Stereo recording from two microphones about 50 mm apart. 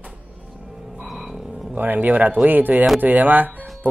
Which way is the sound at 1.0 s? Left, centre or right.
Centre.